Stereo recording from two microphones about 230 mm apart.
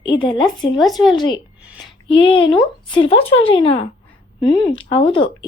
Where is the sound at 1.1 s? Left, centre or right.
Centre.